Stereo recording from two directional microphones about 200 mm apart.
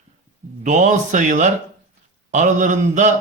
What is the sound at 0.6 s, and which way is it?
Speech, 40° right (ahead or behind).